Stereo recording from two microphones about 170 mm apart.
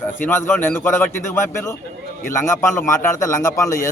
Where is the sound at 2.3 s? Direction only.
15° left (ahead or behind).